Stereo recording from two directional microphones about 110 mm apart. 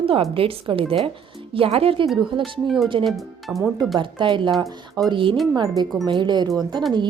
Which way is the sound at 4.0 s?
45° right (ahead or behind).